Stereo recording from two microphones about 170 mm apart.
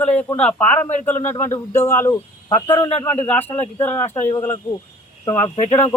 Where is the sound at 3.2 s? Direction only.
10° left (ahead or behind).